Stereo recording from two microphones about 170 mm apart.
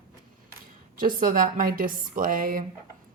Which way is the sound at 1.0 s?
55° right (ahead or behind).